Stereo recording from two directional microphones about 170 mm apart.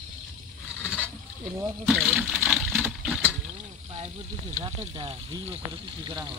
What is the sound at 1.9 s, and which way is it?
Speech, centre (ahead or behind).